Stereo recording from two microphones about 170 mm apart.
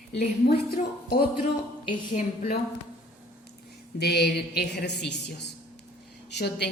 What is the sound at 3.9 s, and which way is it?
A woman's voice, 75° left (ahead or behind).